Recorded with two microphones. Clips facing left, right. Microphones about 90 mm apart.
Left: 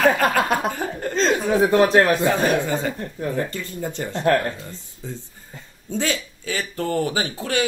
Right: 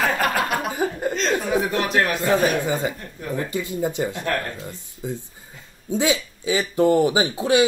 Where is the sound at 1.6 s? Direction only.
30° left (ahead or behind).